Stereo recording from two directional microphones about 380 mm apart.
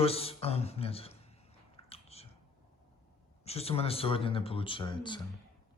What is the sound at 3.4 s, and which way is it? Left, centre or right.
Speech, centre.